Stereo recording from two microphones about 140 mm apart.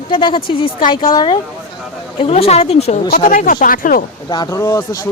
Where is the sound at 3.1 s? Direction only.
75° left (ahead or behind).